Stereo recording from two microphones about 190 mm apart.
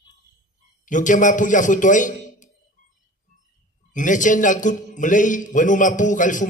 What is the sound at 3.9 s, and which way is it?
A man's voice, 40° left (ahead or behind).